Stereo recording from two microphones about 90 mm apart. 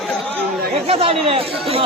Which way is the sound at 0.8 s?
90° right.